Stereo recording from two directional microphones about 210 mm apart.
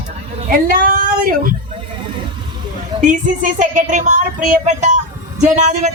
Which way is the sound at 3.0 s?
35° right (ahead or behind).